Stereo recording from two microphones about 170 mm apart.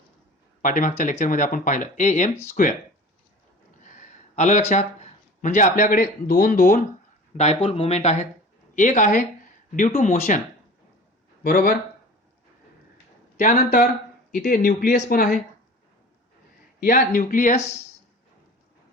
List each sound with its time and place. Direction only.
0.6 s speech: 50° left (ahead or behind)
3.8 s a sound: 50° left (ahead or behind)
4.7 s speech: 45° left (ahead or behind)
7.3 s speech: 40° left (ahead or behind)
11.4 s speech: 60° left (ahead or behind)
13.4 s speech: 50° left (ahead or behind)
14.9 s speech: 50° left (ahead or behind)
16.8 s speech: 55° left (ahead or behind)